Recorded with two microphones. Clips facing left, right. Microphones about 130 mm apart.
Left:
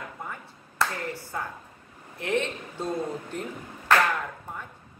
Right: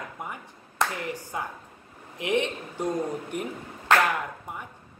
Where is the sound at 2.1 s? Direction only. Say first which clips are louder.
Right 2 dB; 15° right (ahead or behind).